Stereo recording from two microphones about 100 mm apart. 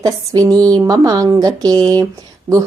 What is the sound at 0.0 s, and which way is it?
Speech, 35° right (ahead or behind).